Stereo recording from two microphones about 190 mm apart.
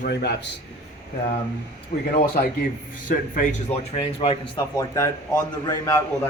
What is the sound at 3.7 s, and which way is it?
Speech, 10° left (ahead or behind).